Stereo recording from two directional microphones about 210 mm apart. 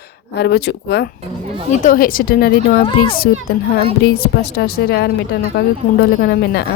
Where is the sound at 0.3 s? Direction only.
55° left (ahead or behind).